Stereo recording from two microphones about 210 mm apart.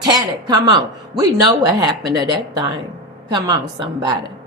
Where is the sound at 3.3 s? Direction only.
20° right (ahead or behind).